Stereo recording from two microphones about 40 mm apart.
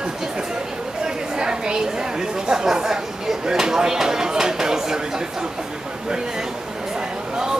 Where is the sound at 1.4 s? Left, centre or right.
Right.